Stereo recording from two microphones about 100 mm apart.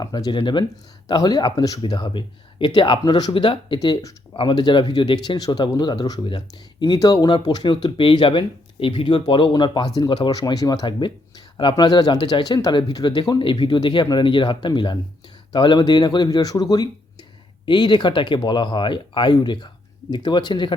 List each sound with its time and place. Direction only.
0.0 s speech: 45° left (ahead or behind)
1.0 s speech: 40° left (ahead or behind)
1.8 s speech: 50° left (ahead or behind)
3.3 s speech: 60° left (ahead or behind)
3.8 s speech: 40° left (ahead or behind)
4.4 s speech: 50° left (ahead or behind)
6.2 s speech: 60° left (ahead or behind)
6.9 s speech: 40° left (ahead or behind)
13.4 s speech: 55° left (ahead or behind); by 16.9 s 40° left (ahead or behind)
17.7 s speech: 50° left (ahead or behind)